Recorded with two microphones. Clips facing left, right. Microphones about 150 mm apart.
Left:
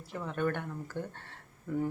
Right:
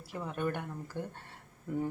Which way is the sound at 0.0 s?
10° right (ahead or behind).